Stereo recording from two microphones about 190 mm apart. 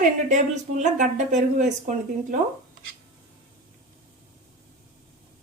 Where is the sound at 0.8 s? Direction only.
40° right (ahead or behind).